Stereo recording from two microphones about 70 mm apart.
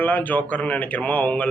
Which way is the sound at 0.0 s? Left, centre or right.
Left.